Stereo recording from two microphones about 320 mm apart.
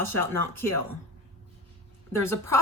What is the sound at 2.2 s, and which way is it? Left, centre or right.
Speech, centre.